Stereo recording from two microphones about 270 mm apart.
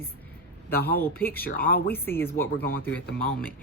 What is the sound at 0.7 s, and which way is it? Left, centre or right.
Speech, left.